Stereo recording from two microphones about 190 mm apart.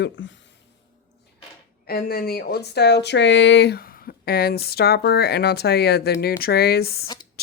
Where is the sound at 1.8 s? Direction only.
55° left (ahead or behind).